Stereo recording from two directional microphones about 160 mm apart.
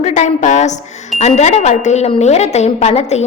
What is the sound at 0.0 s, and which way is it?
A woman's voice, 45° left (ahead or behind).